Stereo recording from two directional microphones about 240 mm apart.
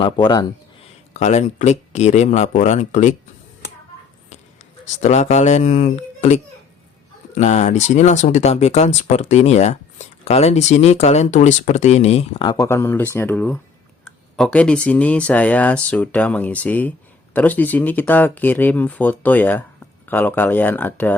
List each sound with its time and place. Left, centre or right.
0.0 s speech: centre
1.1 s speech: left
5.0 s speech: left
7.3 s speech: left; by 21.2 s centre